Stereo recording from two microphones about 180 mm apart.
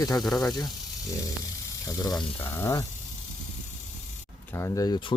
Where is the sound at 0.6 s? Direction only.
20° left (ahead or behind).